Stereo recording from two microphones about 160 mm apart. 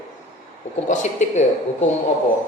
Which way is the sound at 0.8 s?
50° left (ahead or behind).